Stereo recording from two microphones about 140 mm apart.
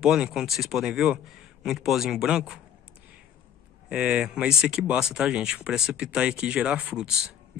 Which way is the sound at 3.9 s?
10° right (ahead or behind).